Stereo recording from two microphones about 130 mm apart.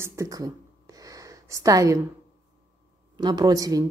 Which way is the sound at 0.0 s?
25° right (ahead or behind).